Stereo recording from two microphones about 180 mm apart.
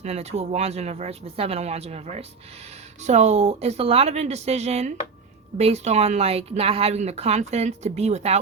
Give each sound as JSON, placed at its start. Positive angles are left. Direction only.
{"t": 0.0, "sound": "a woman's voice", "side_deg": -35}